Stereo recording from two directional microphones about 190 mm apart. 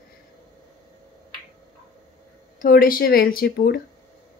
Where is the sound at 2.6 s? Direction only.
50° left (ahead or behind).